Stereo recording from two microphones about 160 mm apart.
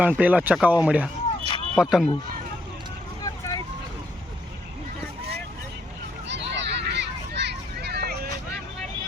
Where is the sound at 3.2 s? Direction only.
25° left (ahead or behind).